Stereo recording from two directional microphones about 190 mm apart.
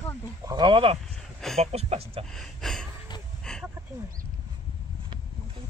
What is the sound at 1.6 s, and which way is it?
Speech, 35° right (ahead or behind).